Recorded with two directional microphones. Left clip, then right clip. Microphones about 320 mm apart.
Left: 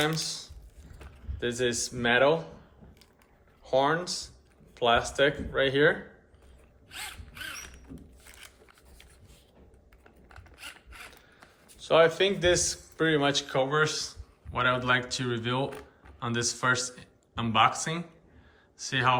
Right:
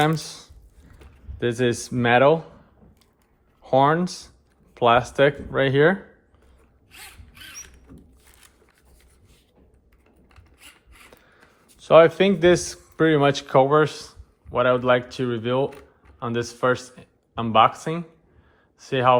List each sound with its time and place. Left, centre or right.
0.1 s a man's voice: centre
3.6 s a man's voice: centre
6.9 s mechanisms: centre
10.2 s mechanisms: centre
11.8 s a man's voice: centre